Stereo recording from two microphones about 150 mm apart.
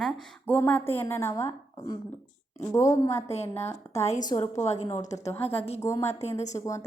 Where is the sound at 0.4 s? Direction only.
10° left (ahead or behind).